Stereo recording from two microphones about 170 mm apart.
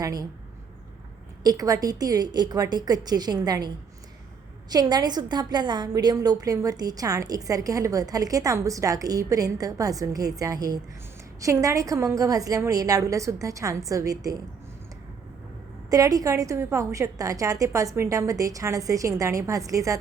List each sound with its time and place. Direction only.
0.0 s a woman's voice: 20° right (ahead or behind)
1.5 s a woman's voice: 20° right (ahead or behind)
4.7 s a woman's voice: 25° right (ahead or behind)
15.9 s a woman's voice: 20° right (ahead or behind)